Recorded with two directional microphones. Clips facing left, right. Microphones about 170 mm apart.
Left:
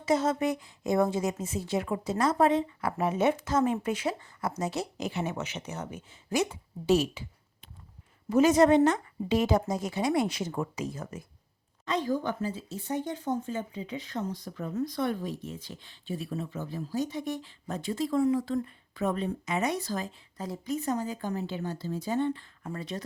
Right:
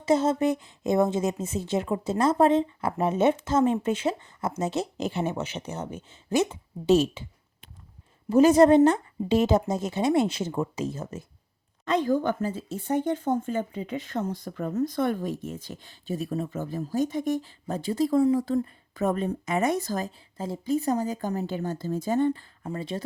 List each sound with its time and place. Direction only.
0.0 s a woman's voice: 25° right (ahead or behind)
8.3 s a woman's voice: 35° right (ahead or behind)
11.9 s speech: 55° right (ahead or behind)
20.3 s speech: 25° right (ahead or behind); by 22.4 s 40° right (ahead or behind)
22.6 s a woman's voice: 25° right (ahead or behind)